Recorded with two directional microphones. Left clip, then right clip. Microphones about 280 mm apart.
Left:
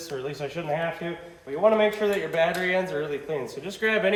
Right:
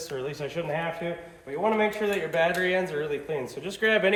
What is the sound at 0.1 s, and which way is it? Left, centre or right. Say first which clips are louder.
Speech: left 2 dB; centre.